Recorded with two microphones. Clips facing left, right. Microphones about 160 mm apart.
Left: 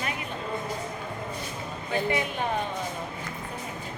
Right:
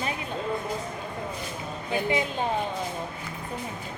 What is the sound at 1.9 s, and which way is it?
Speech, 15° right (ahead or behind).